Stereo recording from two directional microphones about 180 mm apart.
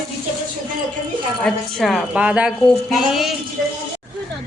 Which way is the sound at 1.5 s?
Centre (ahead or behind).